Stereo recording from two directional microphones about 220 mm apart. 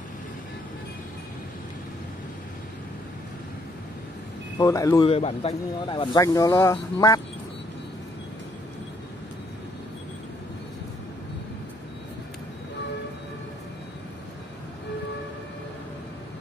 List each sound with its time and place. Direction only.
4.6 s speech: 15° left (ahead or behind)